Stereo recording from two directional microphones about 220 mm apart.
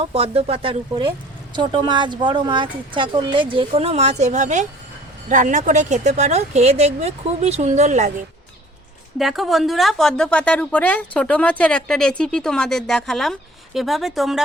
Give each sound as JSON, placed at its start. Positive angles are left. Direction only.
{"t": 0.0, "sound": "a woman's voice", "side_deg": -25}
{"t": 9.1, "sound": "a woman's voice", "side_deg": 0}